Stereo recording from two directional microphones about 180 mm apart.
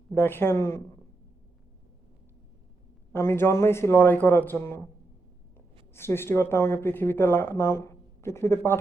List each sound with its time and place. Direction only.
0.1 s speech: 10° left (ahead or behind)
3.1 s speech: 15° left (ahead or behind)
5.9 s speech: 15° left (ahead or behind)